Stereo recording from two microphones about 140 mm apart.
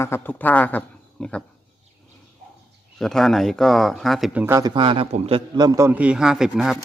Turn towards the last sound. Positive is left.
turn(degrees=-5)  # may be behind; listen again after turning